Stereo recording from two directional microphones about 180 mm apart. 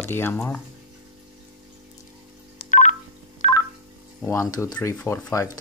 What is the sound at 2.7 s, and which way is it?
Telephone dialing, 45° left (ahead or behind).